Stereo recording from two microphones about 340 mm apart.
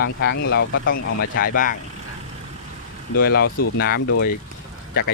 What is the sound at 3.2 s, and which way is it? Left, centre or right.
Speech, left.